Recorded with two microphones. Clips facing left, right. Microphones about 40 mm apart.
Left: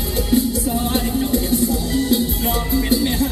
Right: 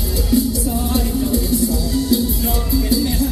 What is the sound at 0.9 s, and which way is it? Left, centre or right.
Music, left.